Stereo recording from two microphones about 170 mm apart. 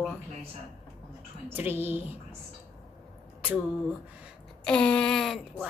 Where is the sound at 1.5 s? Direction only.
10° right (ahead or behind).